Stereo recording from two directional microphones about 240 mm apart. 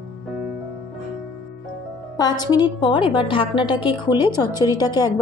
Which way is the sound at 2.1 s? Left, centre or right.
Centre.